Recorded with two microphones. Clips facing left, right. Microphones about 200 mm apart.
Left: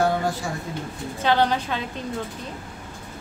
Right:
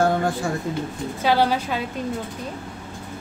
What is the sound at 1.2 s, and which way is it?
Speech, 10° right (ahead or behind).